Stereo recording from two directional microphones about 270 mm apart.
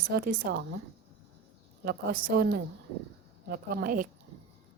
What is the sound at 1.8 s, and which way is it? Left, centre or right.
Speech, right.